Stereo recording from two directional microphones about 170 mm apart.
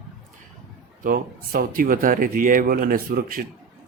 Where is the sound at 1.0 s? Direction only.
55° right (ahead or behind).